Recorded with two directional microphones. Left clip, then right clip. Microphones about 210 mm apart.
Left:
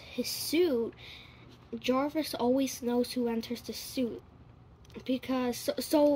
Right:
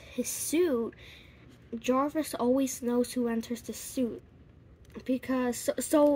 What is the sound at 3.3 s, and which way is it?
Speech, 35° right (ahead or behind).